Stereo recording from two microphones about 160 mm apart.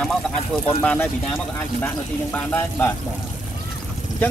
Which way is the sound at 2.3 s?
15° left (ahead or behind).